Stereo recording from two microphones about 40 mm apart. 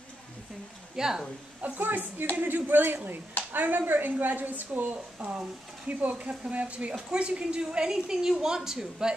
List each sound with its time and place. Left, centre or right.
0.9 s a woman's voice: centre
1.6 s a woman's voice: right
5.9 s a woman's voice: right
7.9 s a woman's voice: centre